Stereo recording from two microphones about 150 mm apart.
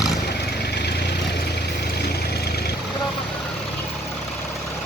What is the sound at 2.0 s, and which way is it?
Vehicle, 90° left.